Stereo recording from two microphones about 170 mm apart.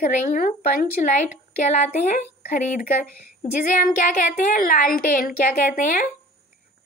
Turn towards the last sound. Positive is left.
turn(degrees=50)  # may be behind; listen again after turning